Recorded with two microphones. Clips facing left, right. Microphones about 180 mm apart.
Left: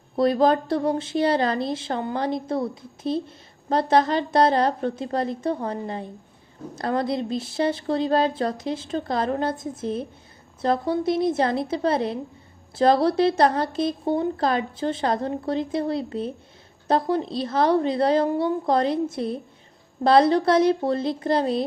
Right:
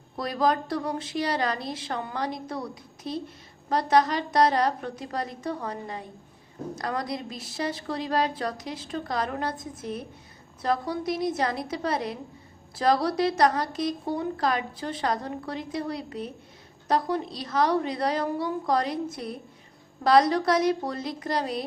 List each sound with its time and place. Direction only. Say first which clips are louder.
0.2 s a woman's voice: left 7 dB; 30° left (ahead or behind)